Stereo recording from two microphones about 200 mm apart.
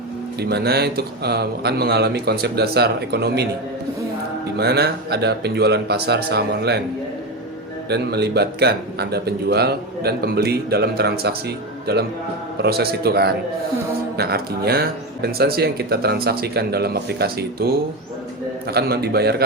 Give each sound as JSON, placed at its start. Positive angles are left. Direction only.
{"t": 0.3, "sound": "speech", "side_deg": -55}
{"t": 4.5, "sound": "speech", "side_deg": -55}
{"t": 7.9, "sound": "speech", "side_deg": -55}